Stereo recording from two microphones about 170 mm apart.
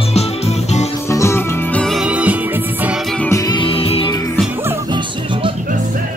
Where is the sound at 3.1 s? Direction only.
10° left (ahead or behind).